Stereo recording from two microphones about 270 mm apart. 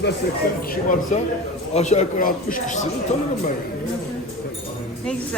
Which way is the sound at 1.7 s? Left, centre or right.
Left.